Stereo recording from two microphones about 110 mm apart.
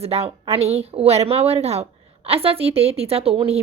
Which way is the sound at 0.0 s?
70° right (ahead or behind).